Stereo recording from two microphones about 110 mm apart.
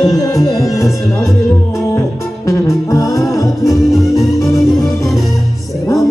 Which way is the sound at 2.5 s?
30° left (ahead or behind).